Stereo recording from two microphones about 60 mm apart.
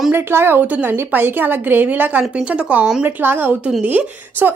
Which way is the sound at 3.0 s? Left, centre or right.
Right.